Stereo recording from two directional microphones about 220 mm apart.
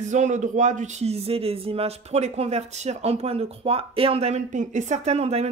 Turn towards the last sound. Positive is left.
turn(degrees=-30)  # may be behind; listen again after turning